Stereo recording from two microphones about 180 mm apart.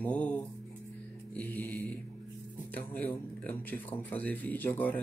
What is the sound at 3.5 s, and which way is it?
Speech, 10° left (ahead or behind).